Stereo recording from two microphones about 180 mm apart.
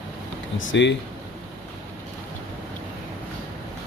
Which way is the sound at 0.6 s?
85° left.